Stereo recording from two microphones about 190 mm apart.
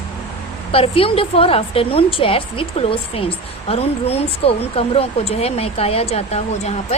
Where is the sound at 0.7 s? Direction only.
30° left (ahead or behind).